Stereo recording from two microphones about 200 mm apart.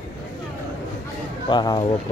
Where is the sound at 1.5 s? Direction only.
20° left (ahead or behind).